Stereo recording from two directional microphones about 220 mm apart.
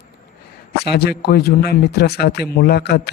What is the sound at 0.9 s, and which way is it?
Speech, 45° left (ahead or behind).